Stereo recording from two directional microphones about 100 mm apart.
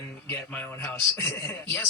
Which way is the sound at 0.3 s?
20° left (ahead or behind).